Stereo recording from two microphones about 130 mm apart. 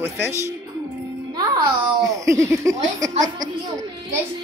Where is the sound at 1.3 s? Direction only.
30° right (ahead or behind).